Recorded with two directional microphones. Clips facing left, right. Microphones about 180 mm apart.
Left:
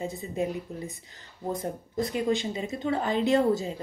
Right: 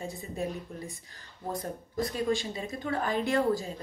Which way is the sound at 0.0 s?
20° left (ahead or behind).